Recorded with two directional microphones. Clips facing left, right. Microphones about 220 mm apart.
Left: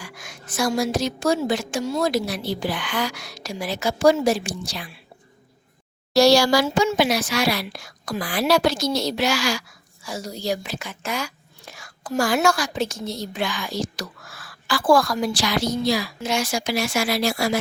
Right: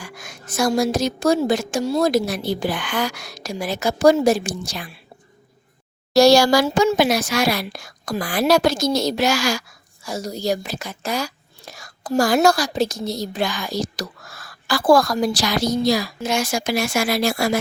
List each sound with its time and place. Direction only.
0.0 s a woman's voice: 45° right (ahead or behind)
6.1 s speech: 45° right (ahead or behind)